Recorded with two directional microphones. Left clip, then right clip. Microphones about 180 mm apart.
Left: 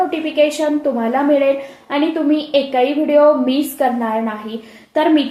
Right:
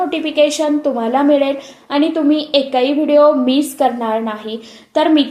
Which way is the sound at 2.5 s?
30° right (ahead or behind).